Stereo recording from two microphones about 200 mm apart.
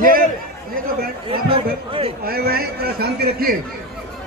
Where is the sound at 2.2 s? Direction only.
50° right (ahead or behind).